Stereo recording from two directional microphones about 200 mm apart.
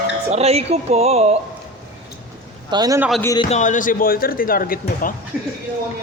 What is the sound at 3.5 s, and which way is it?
Speech, 40° left (ahead or behind).